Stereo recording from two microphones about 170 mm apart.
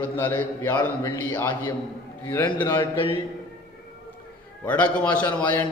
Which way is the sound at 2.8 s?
30° left (ahead or behind).